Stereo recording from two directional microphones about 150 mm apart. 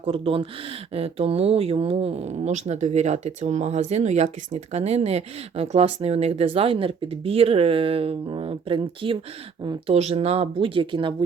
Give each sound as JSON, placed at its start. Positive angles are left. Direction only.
{"t": 0.0, "sound": "speech", "side_deg": -40}